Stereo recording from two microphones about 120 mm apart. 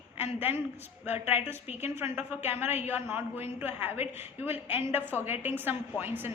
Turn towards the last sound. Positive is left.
turn(degrees=-15)  # may be behind; listen again after turning